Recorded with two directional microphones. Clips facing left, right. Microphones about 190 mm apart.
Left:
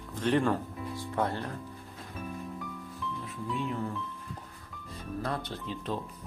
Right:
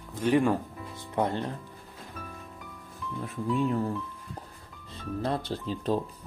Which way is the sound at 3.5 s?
40° right (ahead or behind).